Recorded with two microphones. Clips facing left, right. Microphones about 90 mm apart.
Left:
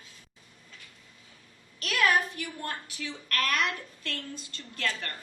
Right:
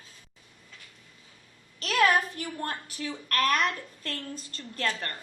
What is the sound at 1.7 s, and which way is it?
A woman's voice, 30° right (ahead or behind).